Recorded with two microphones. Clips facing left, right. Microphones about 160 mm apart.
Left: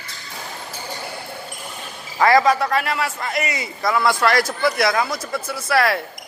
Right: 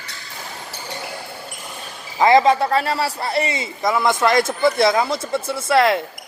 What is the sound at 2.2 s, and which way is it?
A man's voice, 25° right (ahead or behind).